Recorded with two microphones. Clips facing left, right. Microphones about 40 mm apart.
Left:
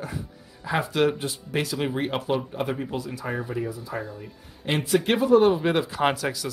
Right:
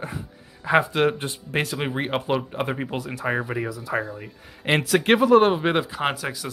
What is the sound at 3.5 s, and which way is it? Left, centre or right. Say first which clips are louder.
Speech: right 1 dB; right.